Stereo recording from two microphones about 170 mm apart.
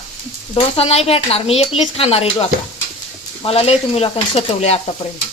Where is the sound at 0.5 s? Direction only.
35° left (ahead or behind).